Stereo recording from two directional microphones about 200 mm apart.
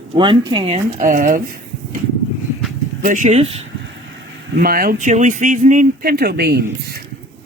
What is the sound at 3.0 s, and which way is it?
Speech, 40° right (ahead or behind).